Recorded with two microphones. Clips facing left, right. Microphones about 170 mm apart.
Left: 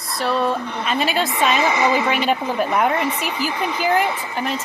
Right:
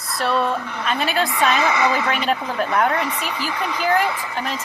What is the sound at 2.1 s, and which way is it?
Speech, 5° left (ahead or behind).